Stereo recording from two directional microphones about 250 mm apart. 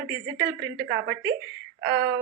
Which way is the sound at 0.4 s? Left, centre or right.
Right.